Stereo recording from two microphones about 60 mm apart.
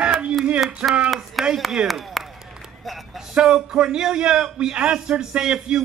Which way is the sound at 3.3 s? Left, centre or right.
Centre.